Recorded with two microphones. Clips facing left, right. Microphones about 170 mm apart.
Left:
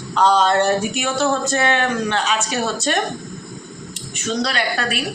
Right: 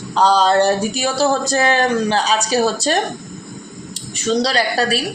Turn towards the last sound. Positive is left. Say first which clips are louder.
# right 5 dB
turn(degrees=-35)  # may be behind; listen again after turning